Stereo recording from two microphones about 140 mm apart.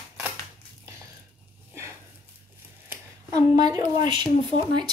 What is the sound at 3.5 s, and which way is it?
A woman's voice, 30° right (ahead or behind).